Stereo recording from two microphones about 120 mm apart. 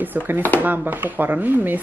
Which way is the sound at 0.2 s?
15° right (ahead or behind).